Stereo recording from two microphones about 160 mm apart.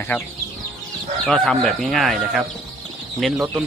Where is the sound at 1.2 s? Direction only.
5° left (ahead or behind).